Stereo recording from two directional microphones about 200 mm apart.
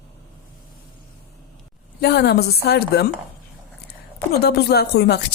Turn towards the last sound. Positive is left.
turn(degrees=55)  # may be behind; listen again after turning